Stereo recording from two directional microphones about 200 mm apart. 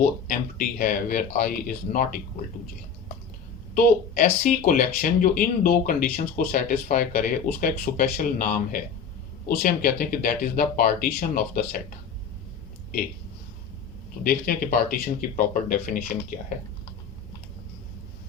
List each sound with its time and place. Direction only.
0.0 s speech: 45° left (ahead or behind)
3.8 s speech: 40° left (ahead or behind)
14.3 s speech: 45° left (ahead or behind)